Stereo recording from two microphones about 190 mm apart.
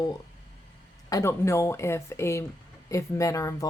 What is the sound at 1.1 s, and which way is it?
Speech, 15° left (ahead or behind).